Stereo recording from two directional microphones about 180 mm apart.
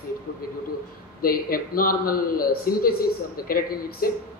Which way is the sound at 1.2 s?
55° left (ahead or behind).